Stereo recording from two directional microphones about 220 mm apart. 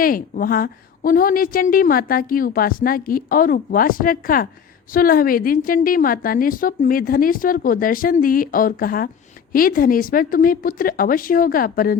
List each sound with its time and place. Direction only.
0.0 s a woman's voice: 40° left (ahead or behind)